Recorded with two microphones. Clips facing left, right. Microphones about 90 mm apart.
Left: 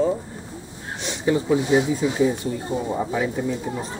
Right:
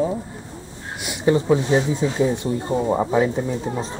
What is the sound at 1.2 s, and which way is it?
Speech, 25° right (ahead or behind).